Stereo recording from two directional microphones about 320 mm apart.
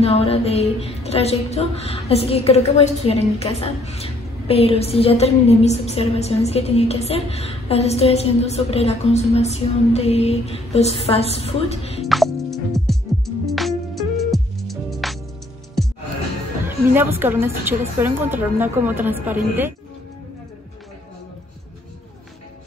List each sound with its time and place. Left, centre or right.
0.0 s music: centre
12.1 s music: centre
16.6 s a woman's voice: centre